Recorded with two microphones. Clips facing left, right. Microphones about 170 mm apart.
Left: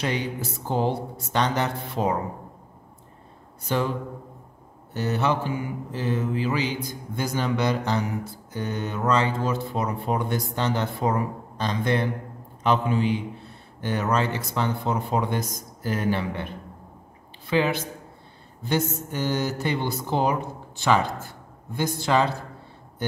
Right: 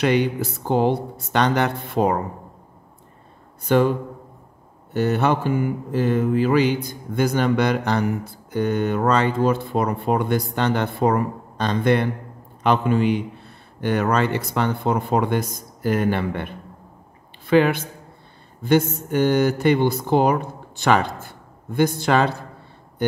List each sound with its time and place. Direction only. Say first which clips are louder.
0.0 s mantra: right 8 dB; 65° right (ahead or behind)
3.6 s mantra: right 8 dB; 55° right (ahead or behind)
4.9 s mantra: right 5 dB; 60° right (ahead or behind)
17.5 s mantra: right 6 dB; 55° right (ahead or behind)